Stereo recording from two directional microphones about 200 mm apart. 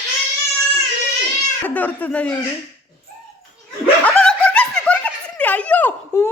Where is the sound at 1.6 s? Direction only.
10° left (ahead or behind).